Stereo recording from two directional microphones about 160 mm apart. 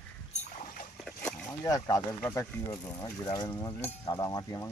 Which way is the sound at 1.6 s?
20° left (ahead or behind).